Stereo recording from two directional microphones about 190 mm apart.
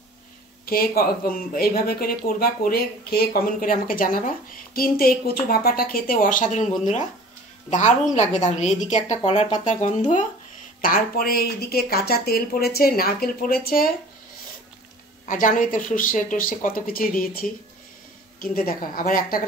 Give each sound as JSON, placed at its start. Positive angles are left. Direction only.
{"t": 0.7, "sound": "speech", "side_deg": 50}
{"t": 8.1, "sound": "speech", "side_deg": 40}
{"t": 15.2, "sound": "speech", "side_deg": 45}
{"t": 18.4, "sound": "speech", "side_deg": 45}